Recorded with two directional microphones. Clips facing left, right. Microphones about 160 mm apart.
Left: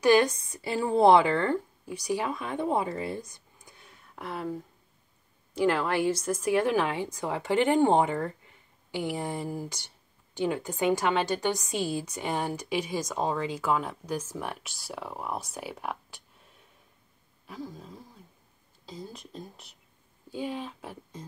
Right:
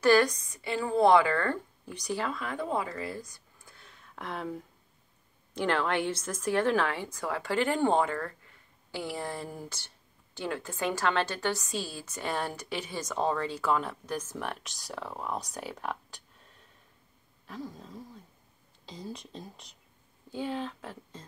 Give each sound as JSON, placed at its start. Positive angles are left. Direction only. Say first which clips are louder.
{"t": 0.0, "sound": "a woman's voice", "louder": "left 1 dB", "side_deg": 20}
{"t": 1.9, "sound": "a woman's voice", "louder": "left 3 dB", "side_deg": 10}
{"t": 17.5, "sound": "speech", "louder": "left 1 dB", "side_deg": 5}